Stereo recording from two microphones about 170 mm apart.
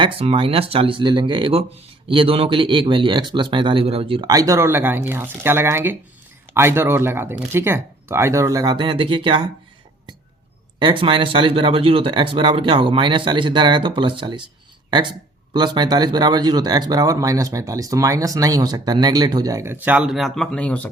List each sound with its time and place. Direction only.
0.0 s speech: 35° right (ahead or behind)
10.8 s speech: 30° right (ahead or behind); by 20.9 s 10° left (ahead or behind)